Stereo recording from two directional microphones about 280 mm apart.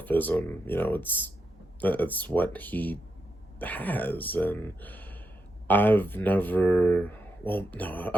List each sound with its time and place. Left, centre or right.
0.0 s speech: centre